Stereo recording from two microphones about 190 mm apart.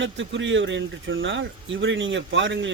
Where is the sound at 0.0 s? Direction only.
75° right (ahead or behind).